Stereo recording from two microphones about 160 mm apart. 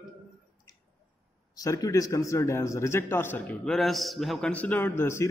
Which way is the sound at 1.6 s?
20° left (ahead or behind).